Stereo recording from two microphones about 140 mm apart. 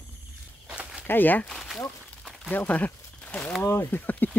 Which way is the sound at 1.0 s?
15° left (ahead or behind).